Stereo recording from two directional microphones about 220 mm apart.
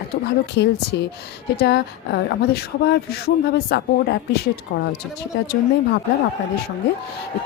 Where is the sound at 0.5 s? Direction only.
50° left (ahead or behind).